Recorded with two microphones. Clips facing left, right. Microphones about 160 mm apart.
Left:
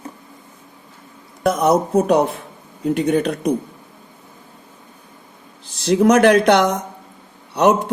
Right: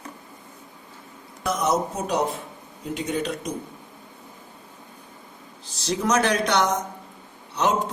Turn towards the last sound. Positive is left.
turn(degrees=65)  # may be behind; listen again after turning